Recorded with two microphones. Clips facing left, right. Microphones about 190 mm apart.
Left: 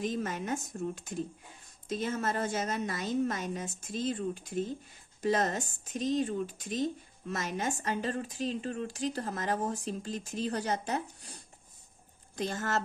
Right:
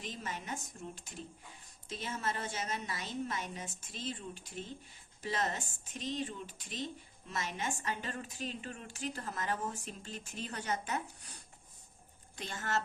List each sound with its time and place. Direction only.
0.0 s a woman's voice: 45° left (ahead or behind)
1.9 s a woman's voice: 45° left (ahead or behind)
12.4 s speech: 40° left (ahead or behind)